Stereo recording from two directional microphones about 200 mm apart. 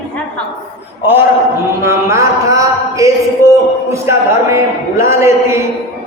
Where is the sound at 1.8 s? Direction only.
15° right (ahead or behind).